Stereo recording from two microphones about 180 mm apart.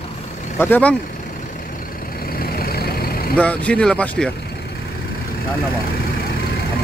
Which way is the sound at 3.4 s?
5° left (ahead or behind).